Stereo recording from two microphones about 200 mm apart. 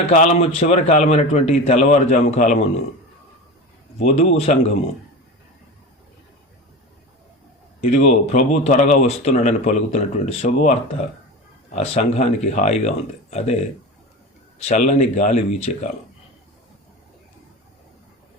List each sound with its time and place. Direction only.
0.0 s speech: 35° left (ahead or behind)
3.9 s speech: 35° left (ahead or behind)
7.8 s speech: 35° left (ahead or behind)
14.6 s speech: 35° left (ahead or behind)